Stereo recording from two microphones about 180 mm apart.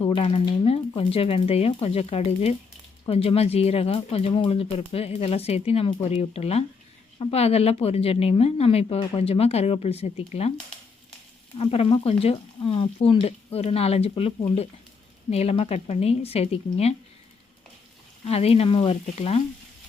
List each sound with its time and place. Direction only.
0.0 s speech: 30° left (ahead or behind)
11.5 s speech: 30° left (ahead or behind)
18.3 s speech: 35° left (ahead or behind)